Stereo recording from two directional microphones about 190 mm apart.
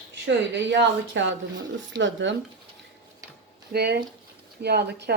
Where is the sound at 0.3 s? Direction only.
70° right (ahead or behind).